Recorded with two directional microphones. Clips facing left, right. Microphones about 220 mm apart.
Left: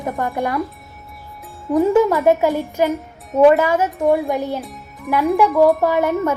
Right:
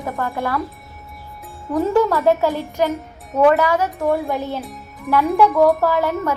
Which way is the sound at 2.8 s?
Centre (ahead or behind).